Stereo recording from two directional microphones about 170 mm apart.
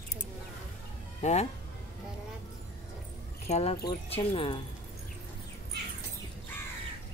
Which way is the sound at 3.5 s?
40° left (ahead or behind).